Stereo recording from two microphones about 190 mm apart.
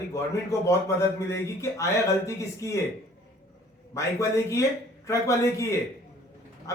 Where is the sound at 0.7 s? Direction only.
15° left (ahead or behind).